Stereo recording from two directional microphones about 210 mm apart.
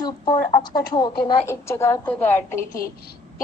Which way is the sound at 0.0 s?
20° left (ahead or behind).